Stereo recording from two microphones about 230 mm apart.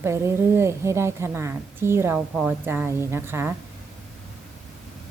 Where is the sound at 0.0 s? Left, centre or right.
Centre.